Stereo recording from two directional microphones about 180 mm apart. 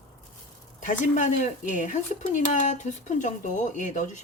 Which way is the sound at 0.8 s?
45° left (ahead or behind).